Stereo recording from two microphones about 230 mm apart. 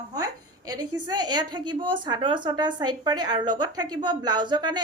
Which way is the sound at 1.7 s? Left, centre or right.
Right.